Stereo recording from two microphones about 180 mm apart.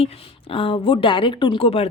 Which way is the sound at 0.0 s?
30° left (ahead or behind).